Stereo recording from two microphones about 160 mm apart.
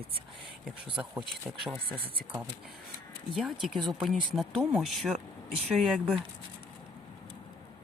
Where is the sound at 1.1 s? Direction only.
5° right (ahead or behind).